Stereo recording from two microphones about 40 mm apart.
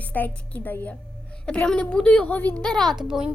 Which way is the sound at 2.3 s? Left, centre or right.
Left.